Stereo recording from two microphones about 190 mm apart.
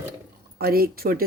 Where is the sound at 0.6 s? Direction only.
50° right (ahead or behind).